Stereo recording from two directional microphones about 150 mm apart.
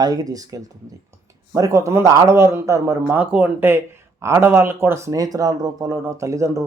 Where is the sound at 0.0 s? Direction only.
25° right (ahead or behind).